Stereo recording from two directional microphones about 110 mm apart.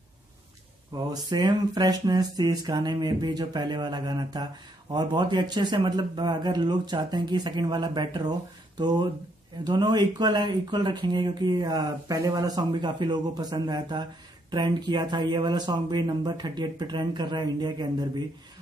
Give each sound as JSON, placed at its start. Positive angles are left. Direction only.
{"t": 1.1, "sound": "speech", "side_deg": -35}